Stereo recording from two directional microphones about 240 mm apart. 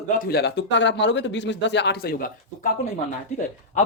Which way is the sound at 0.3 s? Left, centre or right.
Left.